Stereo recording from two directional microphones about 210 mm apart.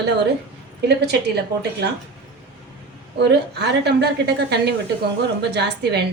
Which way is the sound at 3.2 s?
50° right (ahead or behind).